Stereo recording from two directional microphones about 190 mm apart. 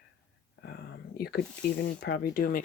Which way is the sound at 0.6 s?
55° left (ahead or behind).